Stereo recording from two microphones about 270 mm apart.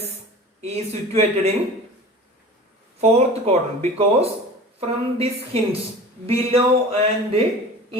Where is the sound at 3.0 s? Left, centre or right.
Right.